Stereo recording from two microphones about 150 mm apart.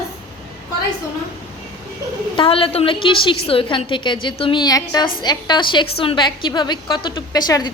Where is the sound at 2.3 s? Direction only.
35° left (ahead or behind).